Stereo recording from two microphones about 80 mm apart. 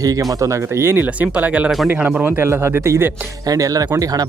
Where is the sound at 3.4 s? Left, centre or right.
Right.